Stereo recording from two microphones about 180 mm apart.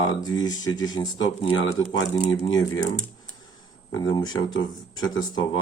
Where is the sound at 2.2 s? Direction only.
35° left (ahead or behind).